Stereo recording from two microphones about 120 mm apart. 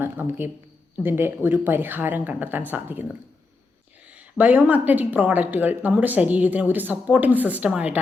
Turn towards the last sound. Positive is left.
turn(degrees=-10)  # may be behind; listen again after turning